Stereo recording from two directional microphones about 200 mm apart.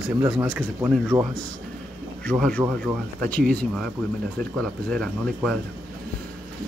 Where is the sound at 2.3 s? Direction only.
5° left (ahead or behind).